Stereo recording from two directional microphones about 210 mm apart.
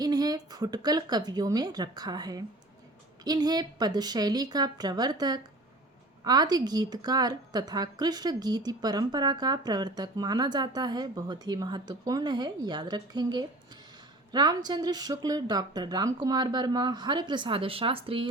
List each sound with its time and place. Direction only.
0.0 s a woman's voice: 20° right (ahead or behind)